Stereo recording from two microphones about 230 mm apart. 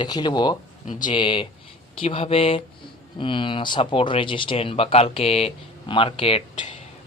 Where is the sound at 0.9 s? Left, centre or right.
Left.